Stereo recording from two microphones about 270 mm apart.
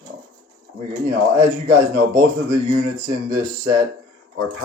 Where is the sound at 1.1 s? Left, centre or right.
Right.